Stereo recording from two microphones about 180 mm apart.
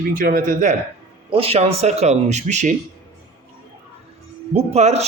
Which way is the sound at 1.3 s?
30° right (ahead or behind).